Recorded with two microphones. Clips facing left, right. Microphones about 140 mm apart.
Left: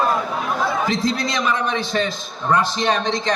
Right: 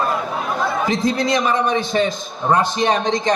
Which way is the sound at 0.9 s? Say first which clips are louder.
Right 3 dB; 15° right (ahead or behind).